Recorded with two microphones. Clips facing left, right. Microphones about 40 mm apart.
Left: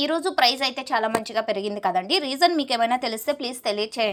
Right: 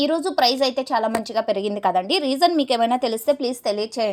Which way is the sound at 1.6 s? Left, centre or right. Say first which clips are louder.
Right 3 dB; right.